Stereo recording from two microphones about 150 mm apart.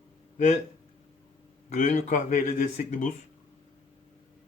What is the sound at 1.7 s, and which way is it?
Speech, 55° left (ahead or behind).